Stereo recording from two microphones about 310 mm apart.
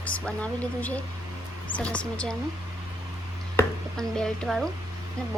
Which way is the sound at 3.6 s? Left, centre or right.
Centre.